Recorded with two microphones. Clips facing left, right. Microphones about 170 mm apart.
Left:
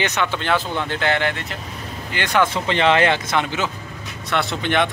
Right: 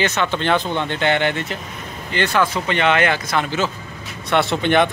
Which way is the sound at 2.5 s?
30° left (ahead or behind).